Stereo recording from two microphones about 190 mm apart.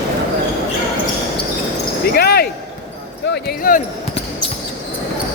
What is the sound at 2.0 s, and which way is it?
Basketball bounce, 55° left (ahead or behind).